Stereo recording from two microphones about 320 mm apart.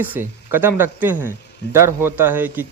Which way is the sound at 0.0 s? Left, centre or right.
Centre.